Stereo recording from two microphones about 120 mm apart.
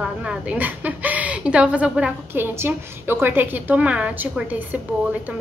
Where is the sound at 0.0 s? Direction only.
5° right (ahead or behind).